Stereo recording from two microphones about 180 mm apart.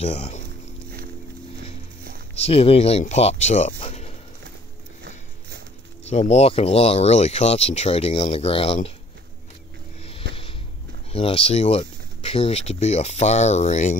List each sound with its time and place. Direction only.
0.0 s speech: 35° left (ahead or behind)
2.4 s speech: 35° left (ahead or behind)
6.0 s speech: 35° left (ahead or behind)
11.1 s speech: 30° left (ahead or behind)